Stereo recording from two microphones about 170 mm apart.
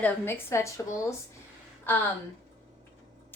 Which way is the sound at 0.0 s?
15° left (ahead or behind).